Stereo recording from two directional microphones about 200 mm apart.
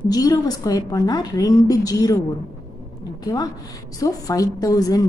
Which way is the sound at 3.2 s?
20° left (ahead or behind).